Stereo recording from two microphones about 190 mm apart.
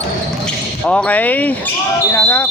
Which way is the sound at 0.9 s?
5° left (ahead or behind).